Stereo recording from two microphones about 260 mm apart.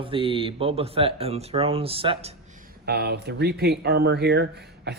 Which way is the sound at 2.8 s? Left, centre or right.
Right.